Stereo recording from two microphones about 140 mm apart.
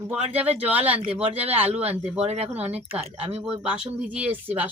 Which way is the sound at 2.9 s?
45° right (ahead or behind).